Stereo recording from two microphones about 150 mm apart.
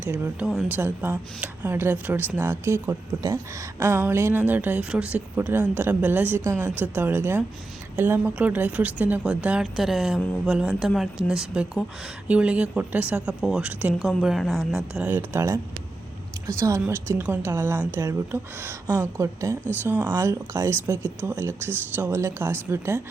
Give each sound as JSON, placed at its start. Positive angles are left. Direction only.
{"t": 0.0, "sound": "a woman's voice", "side_deg": -10}